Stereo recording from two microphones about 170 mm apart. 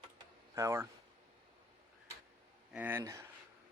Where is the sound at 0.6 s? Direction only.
15° right (ahead or behind).